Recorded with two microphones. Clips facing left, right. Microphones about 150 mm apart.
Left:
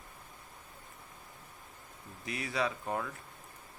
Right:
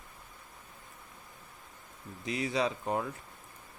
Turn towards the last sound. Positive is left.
turn(degrees=-25)  # may be behind; listen again after turning